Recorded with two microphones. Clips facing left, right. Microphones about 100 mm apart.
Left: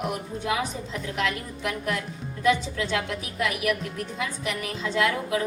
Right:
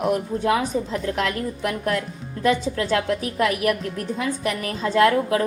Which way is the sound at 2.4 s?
45° right (ahead or behind).